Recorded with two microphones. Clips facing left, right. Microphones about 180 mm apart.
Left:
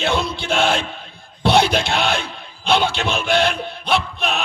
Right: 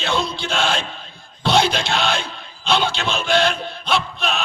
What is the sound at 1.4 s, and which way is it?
Speech, 60° left (ahead or behind).